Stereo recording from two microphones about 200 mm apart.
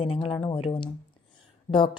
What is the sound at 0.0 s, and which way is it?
A woman's voice, 30° left (ahead or behind).